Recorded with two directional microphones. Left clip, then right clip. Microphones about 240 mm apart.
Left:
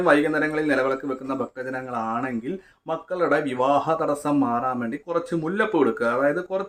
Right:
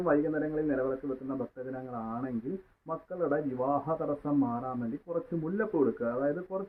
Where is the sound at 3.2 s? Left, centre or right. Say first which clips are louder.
Left 9 dB; left.